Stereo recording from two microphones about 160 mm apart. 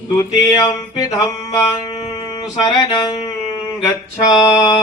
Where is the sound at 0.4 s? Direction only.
20° left (ahead or behind).